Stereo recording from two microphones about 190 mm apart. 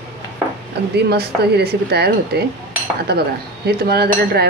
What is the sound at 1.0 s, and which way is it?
Speech, 60° right (ahead or behind).